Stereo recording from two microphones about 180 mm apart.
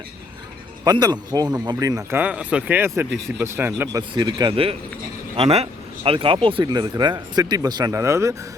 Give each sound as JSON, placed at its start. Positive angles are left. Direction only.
{"t": 0.9, "sound": "speech", "side_deg": -20}
{"t": 4.1, "sound": "speech", "side_deg": -25}